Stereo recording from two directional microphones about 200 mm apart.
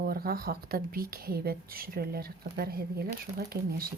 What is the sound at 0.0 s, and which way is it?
Speech, 50° right (ahead or behind).